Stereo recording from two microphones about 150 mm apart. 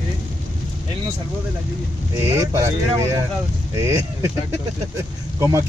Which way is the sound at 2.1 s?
20° right (ahead or behind).